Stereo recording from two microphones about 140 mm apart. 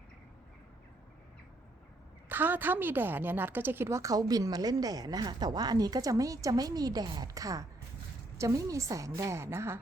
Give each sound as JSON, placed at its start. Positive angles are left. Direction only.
{"t": 2.3, "sound": "a woman's voice", "side_deg": -15}